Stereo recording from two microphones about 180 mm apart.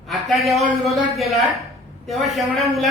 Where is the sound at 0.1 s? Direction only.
Centre (ahead or behind).